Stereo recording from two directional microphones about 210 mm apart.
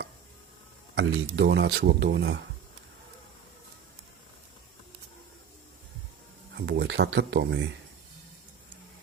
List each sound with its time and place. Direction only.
0.9 s speech: 55° right (ahead or behind)
6.7 s speech: 55° right (ahead or behind)